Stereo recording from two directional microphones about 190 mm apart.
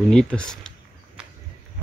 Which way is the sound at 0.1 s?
5° left (ahead or behind).